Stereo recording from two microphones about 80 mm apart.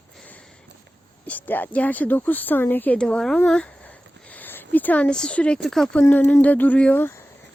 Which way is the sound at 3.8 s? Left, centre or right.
Left.